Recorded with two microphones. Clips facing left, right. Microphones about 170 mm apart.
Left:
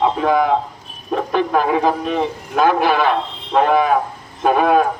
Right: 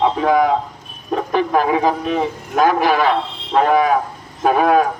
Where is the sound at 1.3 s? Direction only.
5° right (ahead or behind).